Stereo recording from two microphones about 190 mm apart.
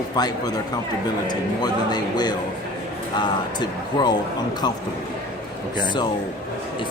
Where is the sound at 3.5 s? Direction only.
20° left (ahead or behind).